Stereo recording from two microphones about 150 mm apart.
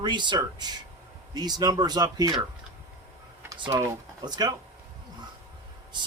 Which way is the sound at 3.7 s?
20° right (ahead or behind).